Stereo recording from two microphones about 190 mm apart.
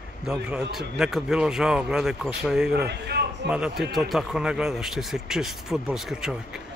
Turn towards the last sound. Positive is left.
turn(degrees=0)  # may be behind; listen again after turning